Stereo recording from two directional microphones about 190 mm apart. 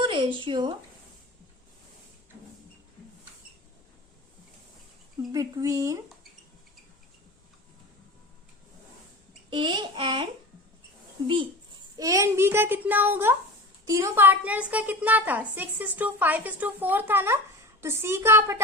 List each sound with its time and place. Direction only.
0.0 s speech: 25° right (ahead or behind)
5.3 s a child's voice: 20° right (ahead or behind)
9.5 s a child's voice: 25° right (ahead or behind)
11.9 s a woman's voice: 15° right (ahead or behind)